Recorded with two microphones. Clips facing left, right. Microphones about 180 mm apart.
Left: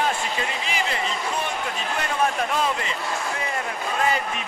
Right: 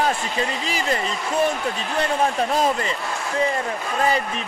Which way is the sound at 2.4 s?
35° right (ahead or behind).